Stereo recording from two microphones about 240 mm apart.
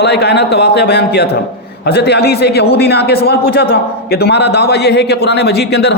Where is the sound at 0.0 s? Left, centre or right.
Left.